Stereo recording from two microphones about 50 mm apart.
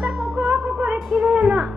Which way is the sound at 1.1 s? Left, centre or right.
Centre.